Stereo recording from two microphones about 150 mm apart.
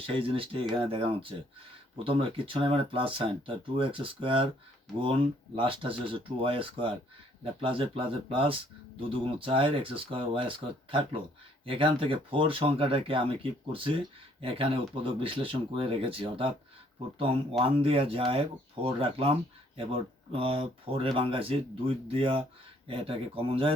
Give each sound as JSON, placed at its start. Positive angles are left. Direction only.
{"t": 0.0, "sound": "speech", "side_deg": -35}
{"t": 11.6, "sound": "speech", "side_deg": -35}
{"t": 17.6, "sound": "speech", "side_deg": -35}